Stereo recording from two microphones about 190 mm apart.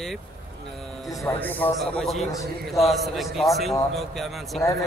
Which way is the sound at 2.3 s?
15° left (ahead or behind).